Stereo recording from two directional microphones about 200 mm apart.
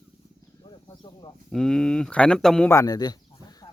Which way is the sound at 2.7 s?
15° left (ahead or behind).